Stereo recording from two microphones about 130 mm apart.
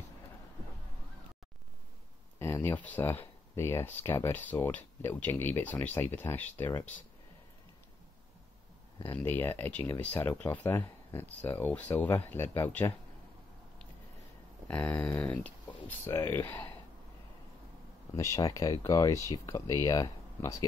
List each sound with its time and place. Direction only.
2.3 s a sound: 20° left (ahead or behind)
2.8 s speech: 15° left (ahead or behind)
9.0 s speech: 15° left (ahead or behind)
14.7 s speech: 10° left (ahead or behind)
18.1 s speech: 25° left (ahead or behind)